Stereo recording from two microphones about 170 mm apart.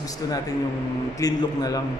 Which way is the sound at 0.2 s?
20° left (ahead or behind).